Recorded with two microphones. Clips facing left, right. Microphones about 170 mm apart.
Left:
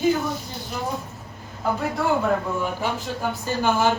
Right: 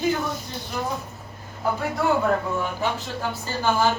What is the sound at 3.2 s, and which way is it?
Speech, 15° left (ahead or behind).